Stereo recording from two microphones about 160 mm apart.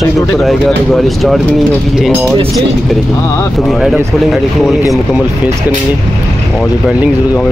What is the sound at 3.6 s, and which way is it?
Speech, centre (ahead or behind).